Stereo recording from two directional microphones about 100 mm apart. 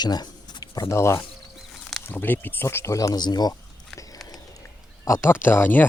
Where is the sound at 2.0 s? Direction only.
20° left (ahead or behind); by 3.5 s 45° left (ahead or behind).